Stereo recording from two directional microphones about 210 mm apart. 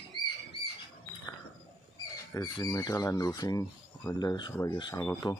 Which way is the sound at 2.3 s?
15° left (ahead or behind).